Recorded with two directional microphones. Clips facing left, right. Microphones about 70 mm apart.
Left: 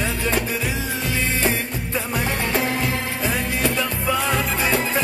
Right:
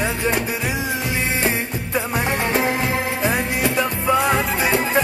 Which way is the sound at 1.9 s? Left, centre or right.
Right.